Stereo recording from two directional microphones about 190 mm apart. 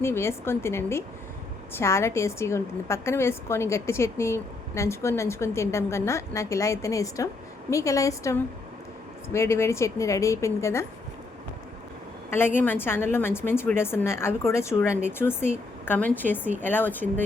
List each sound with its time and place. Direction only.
0.0 s a woman's voice: 15° left (ahead or behind)
12.3 s a woman's voice: 10° left (ahead or behind)